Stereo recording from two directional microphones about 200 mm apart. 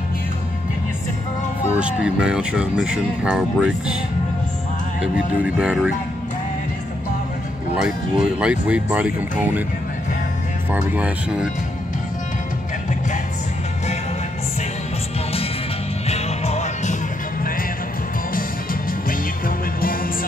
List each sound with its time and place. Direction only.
1.8 s speech: 5° right (ahead or behind)
5.0 s speech: 5° right (ahead or behind)
7.8 s speech: 5° right (ahead or behind)
10.7 s speech: 5° right (ahead or behind)
16.1 s music: 35° left (ahead or behind)
18.3 s music: 45° left (ahead or behind)